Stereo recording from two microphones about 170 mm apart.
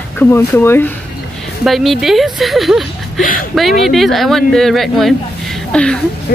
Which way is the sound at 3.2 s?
55° left (ahead or behind).